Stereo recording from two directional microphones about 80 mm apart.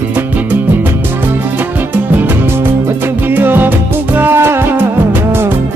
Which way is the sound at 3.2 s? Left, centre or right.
Right.